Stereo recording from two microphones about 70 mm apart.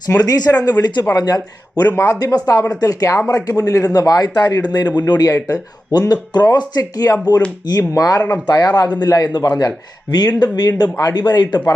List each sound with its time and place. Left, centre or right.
0.2 s speech: left
1.0 s speech: left
6.7 s speech: left
8.4 s speech: left